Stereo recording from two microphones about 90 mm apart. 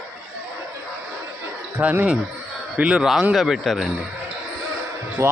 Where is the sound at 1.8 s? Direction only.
15° right (ahead or behind).